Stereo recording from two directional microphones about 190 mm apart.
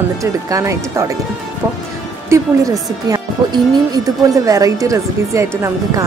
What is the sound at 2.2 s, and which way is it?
Speech, 15° right (ahead or behind).